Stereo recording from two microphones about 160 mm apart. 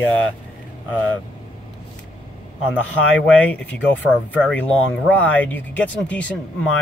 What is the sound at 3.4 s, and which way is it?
Speech, 10° left (ahead or behind).